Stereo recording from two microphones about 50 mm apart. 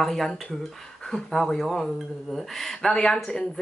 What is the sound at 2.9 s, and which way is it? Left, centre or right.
Speech, centre.